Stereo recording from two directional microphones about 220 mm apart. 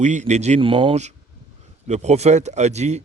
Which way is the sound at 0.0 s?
30° right (ahead or behind).